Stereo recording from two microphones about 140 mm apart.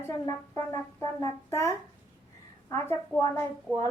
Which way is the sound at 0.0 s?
20° left (ahead or behind).